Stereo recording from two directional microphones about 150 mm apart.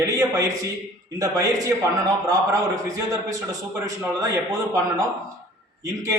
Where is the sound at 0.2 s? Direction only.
20° right (ahead or behind).